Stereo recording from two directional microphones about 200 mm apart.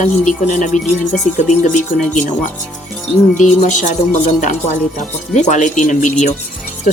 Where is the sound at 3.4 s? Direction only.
40° left (ahead or behind).